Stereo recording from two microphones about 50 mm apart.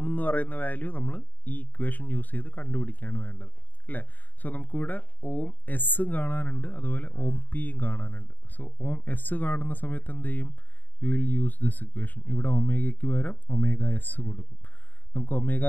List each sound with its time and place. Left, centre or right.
0.0 s speech: left